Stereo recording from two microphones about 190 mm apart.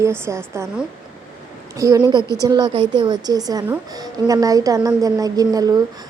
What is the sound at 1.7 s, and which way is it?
A woman's voice, 20° right (ahead or behind).